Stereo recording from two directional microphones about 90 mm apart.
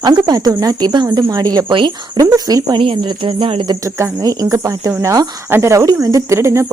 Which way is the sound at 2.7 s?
80° right.